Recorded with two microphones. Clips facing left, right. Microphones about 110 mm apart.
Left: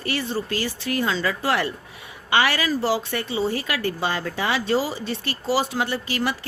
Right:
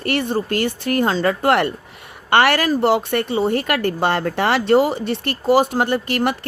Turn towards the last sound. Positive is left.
turn(degrees=-55)  # may be behind; listen again after turning